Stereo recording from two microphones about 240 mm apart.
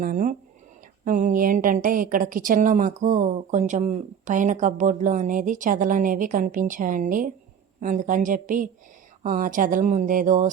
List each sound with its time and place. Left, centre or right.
0.0 s a woman's voice: right